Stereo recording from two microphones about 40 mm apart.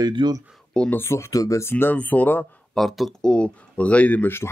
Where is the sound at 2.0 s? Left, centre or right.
Left.